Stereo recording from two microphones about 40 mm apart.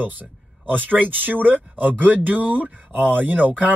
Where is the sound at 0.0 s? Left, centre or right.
Right.